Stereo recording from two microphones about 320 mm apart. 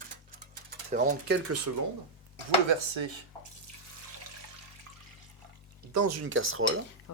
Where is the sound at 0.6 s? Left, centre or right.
Right.